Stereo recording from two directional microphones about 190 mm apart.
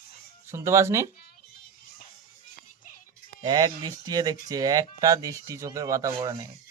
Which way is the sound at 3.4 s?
25° right (ahead or behind).